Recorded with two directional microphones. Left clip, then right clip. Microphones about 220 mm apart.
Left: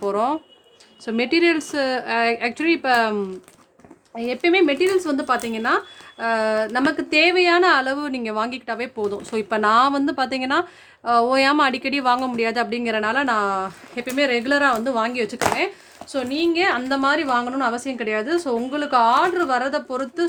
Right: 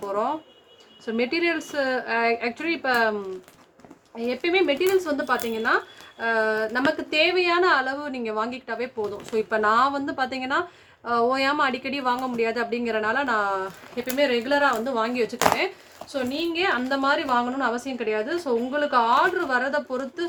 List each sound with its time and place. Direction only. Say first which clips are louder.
0.1 s speech: left 2 dB; 55° left (ahead or behind)
4.2 s speech: left 5 dB; 50° left (ahead or behind)